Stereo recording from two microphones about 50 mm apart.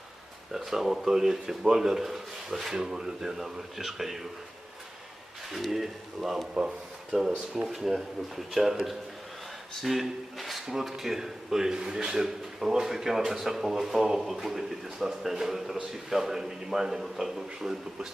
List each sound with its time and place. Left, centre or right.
0.5 s speech: centre
5.5 s speech: centre
6.5 s speech: centre